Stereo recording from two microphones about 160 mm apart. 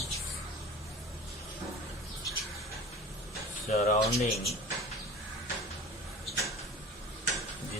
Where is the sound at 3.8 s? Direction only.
40° left (ahead or behind).